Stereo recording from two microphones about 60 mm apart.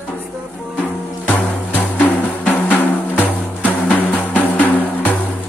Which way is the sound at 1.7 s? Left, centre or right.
Left.